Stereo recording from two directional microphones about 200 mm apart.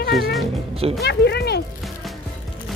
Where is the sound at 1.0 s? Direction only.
55° left (ahead or behind).